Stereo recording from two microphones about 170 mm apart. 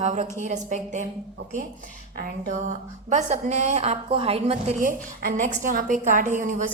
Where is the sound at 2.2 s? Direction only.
50° right (ahead or behind).